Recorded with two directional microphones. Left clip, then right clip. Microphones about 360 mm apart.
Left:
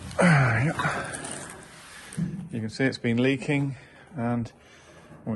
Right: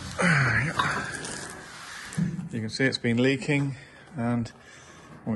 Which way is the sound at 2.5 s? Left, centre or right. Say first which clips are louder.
Right 1 dB; centre.